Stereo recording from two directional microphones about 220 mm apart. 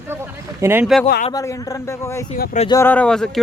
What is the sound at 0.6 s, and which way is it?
Speech, 10° right (ahead or behind).